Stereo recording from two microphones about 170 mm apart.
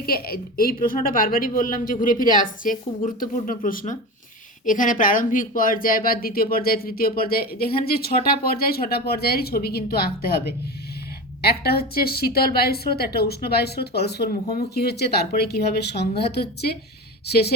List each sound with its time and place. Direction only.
0.0 s speech: 60° left (ahead or behind)
11.4 s speech: 65° left (ahead or behind)